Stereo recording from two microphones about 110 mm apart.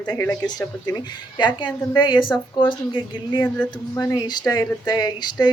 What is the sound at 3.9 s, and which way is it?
Speech, 35° left (ahead or behind).